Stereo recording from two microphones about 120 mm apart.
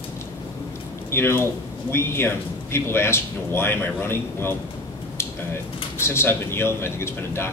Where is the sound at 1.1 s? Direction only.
20° left (ahead or behind).